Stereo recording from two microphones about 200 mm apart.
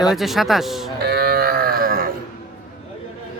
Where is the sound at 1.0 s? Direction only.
50° right (ahead or behind).